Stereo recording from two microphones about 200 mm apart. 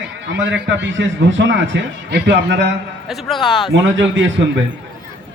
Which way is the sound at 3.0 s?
Centre (ahead or behind).